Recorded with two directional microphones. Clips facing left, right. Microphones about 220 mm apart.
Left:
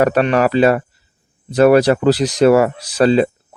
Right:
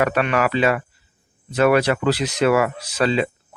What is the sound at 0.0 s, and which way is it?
Speech, 35° left (ahead or behind).